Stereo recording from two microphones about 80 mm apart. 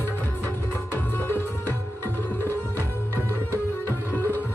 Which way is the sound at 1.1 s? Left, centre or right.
Left.